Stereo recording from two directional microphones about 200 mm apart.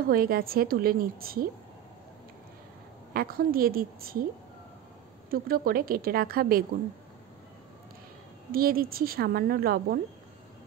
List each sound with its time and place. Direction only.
0.0 s a woman's voice: 45° right (ahead or behind)
3.1 s a woman's voice: 45° right (ahead or behind)
5.3 s a woman's voice: 45° right (ahead or behind)
8.5 s a woman's voice: 45° right (ahead or behind)